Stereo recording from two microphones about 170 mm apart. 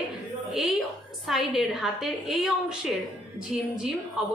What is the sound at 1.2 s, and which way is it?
A woman's voice, centre (ahead or behind).